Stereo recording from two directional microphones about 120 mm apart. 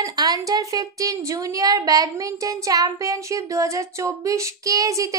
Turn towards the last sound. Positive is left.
turn(degrees=-30)  # may be behind; listen again after turning